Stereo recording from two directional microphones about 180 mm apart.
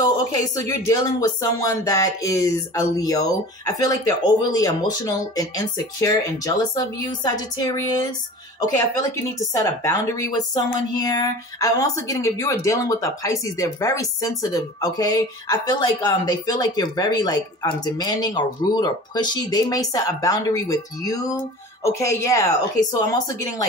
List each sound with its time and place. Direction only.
0.0 s a woman's voice: 20° left (ahead or behind)